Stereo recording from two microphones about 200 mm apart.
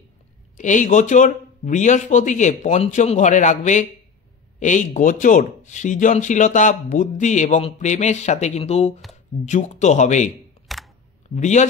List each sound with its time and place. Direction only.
0.6 s speech: 40° left (ahead or behind)
10.7 s camera: centre (ahead or behind)
11.2 s speech: 35° left (ahead or behind)